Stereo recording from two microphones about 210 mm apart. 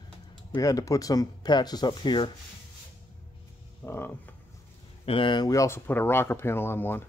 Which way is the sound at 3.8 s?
10° left (ahead or behind).